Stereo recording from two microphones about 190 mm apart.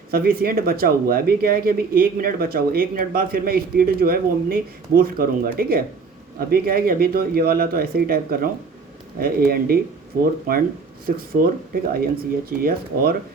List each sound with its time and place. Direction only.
0.1 s speech: 50° right (ahead or behind)